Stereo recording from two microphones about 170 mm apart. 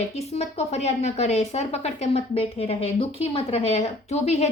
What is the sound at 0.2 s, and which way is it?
A woman's voice, 40° left (ahead or behind).